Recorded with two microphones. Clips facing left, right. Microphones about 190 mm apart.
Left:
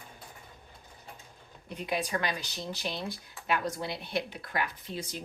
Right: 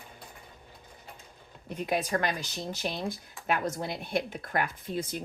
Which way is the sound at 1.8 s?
45° right (ahead or behind).